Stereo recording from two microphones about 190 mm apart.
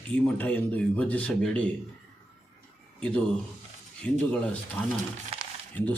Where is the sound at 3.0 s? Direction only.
5° left (ahead or behind).